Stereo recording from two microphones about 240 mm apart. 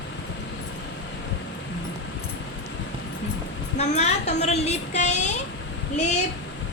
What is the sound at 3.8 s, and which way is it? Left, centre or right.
A woman's voice, left.